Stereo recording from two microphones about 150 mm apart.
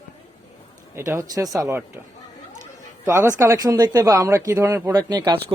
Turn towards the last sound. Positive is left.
turn(degrees=-30)  # may be behind; listen again after turning